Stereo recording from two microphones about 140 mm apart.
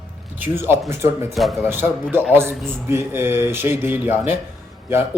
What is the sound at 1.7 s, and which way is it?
Speech, 15° right (ahead or behind).